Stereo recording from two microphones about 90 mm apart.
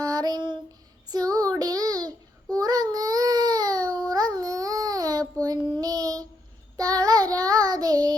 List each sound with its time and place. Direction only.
0.0 s a sound: 45° right (ahead or behind)
1.1 s child singing: 45° right (ahead or behind)
2.6 s baby cry: 45° right (ahead or behind)
4.1 s child singing: 45° right (ahead or behind)